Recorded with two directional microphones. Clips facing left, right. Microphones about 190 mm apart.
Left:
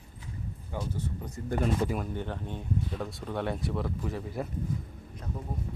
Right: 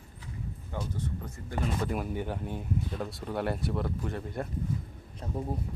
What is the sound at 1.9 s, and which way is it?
Speech, 5° right (ahead or behind).